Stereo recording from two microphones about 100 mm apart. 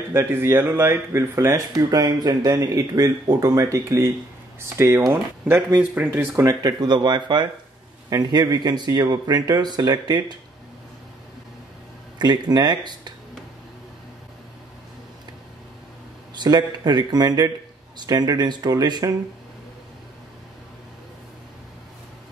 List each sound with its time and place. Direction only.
0.1 s speech: 25° right (ahead or behind)
1.8 s speech: 40° right (ahead or behind)
6.6 s speech: 45° right (ahead or behind)
12.2 s speech: 45° right (ahead or behind)
16.3 s speech: 45° right (ahead or behind)